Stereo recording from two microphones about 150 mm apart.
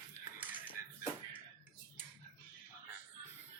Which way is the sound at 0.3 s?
10° right (ahead or behind).